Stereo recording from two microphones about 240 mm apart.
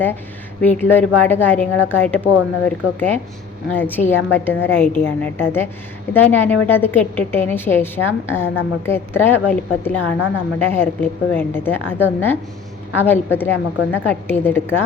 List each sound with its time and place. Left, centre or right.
0.6 s a woman's voice: centre
10.2 s a woman's voice: left
10.6 s a woman's voice: centre